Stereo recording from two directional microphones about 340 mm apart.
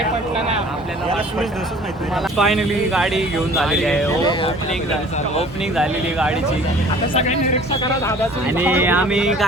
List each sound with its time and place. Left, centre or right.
2.3 s speech: centre
5.7 s speech: centre
7.1 s speech: centre
8.5 s speech: centre